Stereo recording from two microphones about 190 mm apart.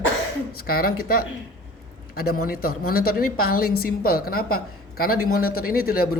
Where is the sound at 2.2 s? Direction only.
50° left (ahead or behind).